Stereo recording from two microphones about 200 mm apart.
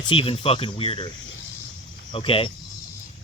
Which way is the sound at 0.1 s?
25° left (ahead or behind).